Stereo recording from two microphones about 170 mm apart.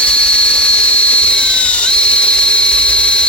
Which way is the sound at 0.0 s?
5° left (ahead or behind).